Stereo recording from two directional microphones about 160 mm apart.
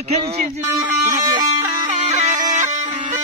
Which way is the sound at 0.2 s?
40° right (ahead or behind).